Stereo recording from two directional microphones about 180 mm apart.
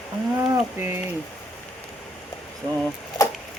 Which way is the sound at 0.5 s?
10° right (ahead or behind).